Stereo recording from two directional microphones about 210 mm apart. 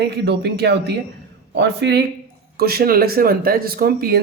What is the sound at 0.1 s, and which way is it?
Speech, 50° right (ahead or behind).